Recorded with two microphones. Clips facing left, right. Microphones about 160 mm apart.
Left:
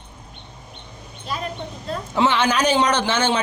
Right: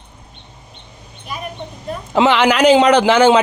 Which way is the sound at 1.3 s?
15° right (ahead or behind).